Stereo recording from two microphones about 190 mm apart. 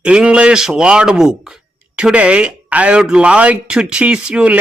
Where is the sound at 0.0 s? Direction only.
5° right (ahead or behind).